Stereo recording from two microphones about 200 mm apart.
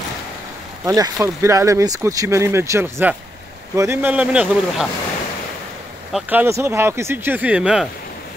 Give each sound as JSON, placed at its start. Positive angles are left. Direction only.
{"t": 0.8, "sound": "speech", "side_deg": -15}
{"t": 6.1, "sound": "speech", "side_deg": -10}